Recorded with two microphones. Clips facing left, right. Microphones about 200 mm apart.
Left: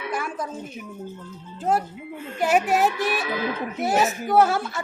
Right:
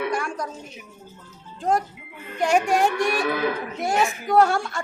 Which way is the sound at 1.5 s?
5° left (ahead or behind).